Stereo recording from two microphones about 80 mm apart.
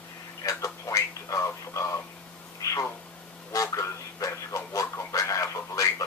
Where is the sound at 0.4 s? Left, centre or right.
Left.